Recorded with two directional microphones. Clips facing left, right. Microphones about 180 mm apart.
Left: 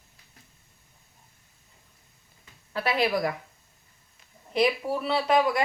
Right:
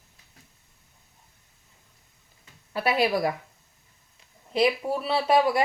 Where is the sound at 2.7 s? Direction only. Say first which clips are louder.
Right 2 dB; 10° right (ahead or behind).